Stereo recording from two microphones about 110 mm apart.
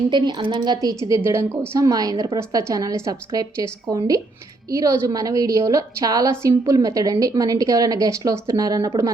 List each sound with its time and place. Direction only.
0.1 s a woman's voice: 45° right (ahead or behind)